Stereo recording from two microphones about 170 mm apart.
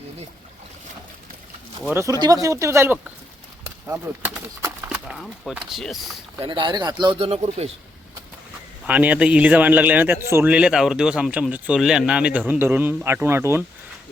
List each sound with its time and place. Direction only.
1.9 s a man's voice: 15° right (ahead or behind); by 6.0 s centre (ahead or behind)
6.4 s speech: 30° right (ahead or behind)
8.9 s a man's voice: 10° right (ahead or behind)